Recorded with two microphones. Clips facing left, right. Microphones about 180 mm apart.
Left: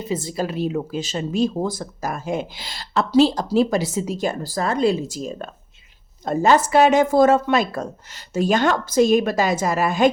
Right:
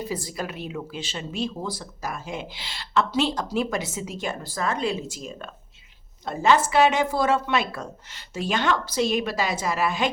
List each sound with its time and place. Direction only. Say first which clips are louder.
0.0 s speech: left 6 dB; 25° left (ahead or behind); by 10.1 s 45° left (ahead or behind)